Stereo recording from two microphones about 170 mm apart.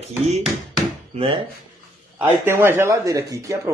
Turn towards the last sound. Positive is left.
turn(degrees=-20)  # may be behind; listen again after turning